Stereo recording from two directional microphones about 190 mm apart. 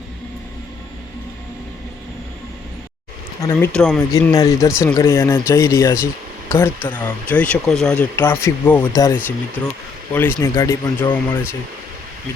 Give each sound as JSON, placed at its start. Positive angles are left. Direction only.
{"t": 3.4, "sound": "speech", "side_deg": 10}
{"t": 4.1, "sound": "speech", "side_deg": 20}